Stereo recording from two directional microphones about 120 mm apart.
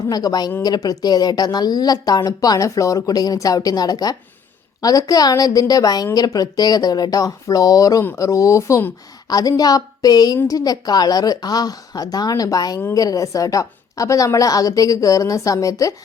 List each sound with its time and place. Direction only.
0.1 s a woman's voice: 30° left (ahead or behind)